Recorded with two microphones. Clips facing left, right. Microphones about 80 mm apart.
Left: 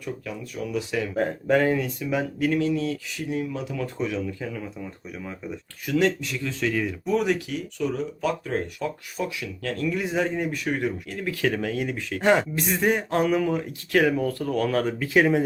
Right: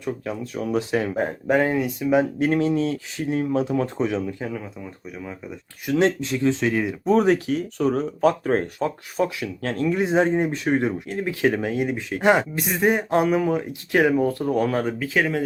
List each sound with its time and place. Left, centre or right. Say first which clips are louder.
0.0 s speech: right 5 dB; right
1.1 s speech: left 2 dB; centre
2.5 s speech: right 3 dB; right
5.8 s speech: right 3 dB; right
7.1 s speech: right 6 dB; right; by 14.9 s centre
14.9 s speech: left 2 dB; centre
15.2 s speech: left 3 dB; centre